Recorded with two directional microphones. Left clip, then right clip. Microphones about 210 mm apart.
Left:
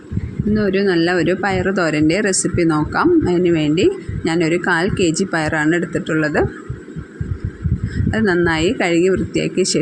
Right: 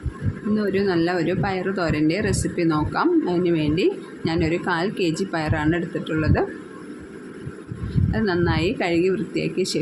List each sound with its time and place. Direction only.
0.5 s speech: 20° left (ahead or behind)
8.1 s speech: 25° left (ahead or behind)